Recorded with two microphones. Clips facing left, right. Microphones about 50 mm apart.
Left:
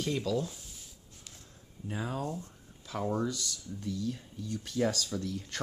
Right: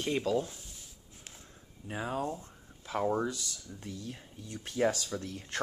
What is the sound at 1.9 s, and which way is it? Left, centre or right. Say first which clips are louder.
Speech: right 1 dB; centre.